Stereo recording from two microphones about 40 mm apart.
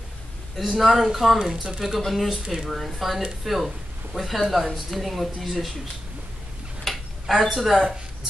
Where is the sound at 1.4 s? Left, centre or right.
Centre.